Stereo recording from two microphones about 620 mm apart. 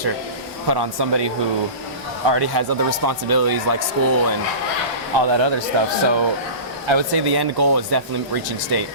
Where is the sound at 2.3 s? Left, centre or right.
Right.